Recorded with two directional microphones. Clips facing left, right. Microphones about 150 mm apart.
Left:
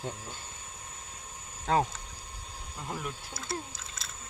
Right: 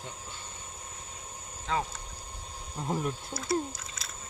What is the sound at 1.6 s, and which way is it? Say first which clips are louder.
Speech: left 5 dB; 50° left (ahead or behind).